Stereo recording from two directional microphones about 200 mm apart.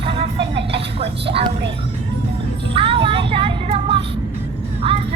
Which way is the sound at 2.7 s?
25° right (ahead or behind).